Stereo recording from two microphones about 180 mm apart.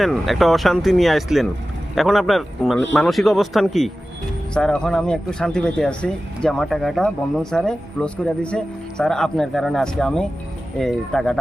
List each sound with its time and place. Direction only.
0.0 s speech: centre (ahead or behind)